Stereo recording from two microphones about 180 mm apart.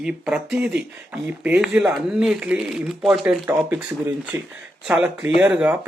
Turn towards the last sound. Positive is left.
turn(degrees=-10)  # may be behind; listen again after turning